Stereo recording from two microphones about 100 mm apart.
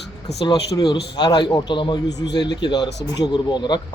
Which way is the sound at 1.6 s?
50° left (ahead or behind).